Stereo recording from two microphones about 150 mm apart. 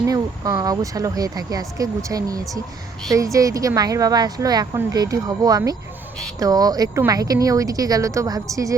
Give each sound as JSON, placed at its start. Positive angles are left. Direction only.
{"t": 0.0, "sound": "speech", "side_deg": -20}